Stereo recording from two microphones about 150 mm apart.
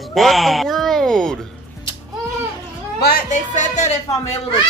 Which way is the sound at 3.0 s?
75° left (ahead or behind).